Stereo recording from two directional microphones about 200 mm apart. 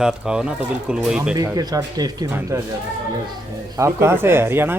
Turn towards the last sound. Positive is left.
turn(degrees=-10)  # may be behind; listen again after turning